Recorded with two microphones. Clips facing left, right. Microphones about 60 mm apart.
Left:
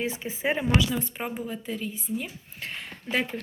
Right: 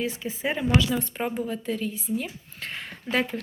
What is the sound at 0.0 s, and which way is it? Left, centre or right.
Speech, left.